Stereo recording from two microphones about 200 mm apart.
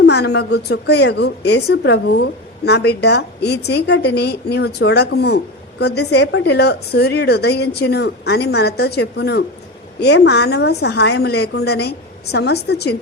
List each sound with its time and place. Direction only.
0.0 s a woman's voice: 55° left (ahead or behind)